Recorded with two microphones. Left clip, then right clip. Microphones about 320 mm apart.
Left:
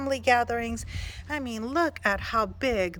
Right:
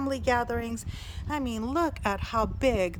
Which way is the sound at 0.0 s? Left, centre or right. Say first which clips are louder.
Left 4 dB; centre.